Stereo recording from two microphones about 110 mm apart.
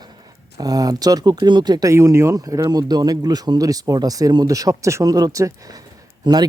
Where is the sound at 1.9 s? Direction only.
25° right (ahead or behind).